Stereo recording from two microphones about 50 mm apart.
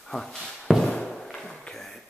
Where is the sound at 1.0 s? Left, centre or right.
Centre.